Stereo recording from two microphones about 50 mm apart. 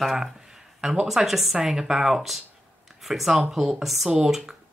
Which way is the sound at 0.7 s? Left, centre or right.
Centre.